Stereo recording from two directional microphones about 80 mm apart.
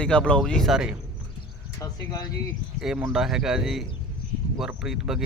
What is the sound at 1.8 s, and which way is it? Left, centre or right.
Speech, left.